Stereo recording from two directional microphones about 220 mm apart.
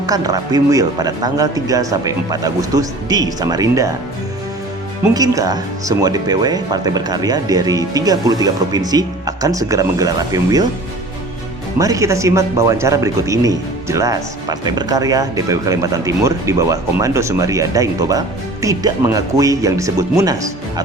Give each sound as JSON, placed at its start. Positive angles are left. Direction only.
{"t": 0.0, "sound": "speech", "side_deg": -15}
{"t": 5.1, "sound": "speech", "side_deg": -15}
{"t": 11.8, "sound": "speech", "side_deg": -15}